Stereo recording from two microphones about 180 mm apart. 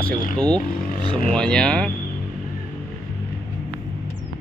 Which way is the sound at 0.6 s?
50° left (ahead or behind).